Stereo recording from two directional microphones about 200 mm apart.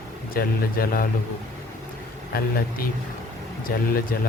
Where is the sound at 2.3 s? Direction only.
50° left (ahead or behind).